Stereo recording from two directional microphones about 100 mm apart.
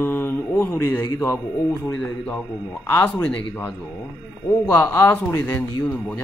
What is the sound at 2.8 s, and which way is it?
Speech, 25° left (ahead or behind).